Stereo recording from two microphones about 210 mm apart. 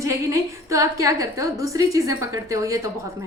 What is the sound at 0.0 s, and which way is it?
A woman's voice, 15° right (ahead or behind).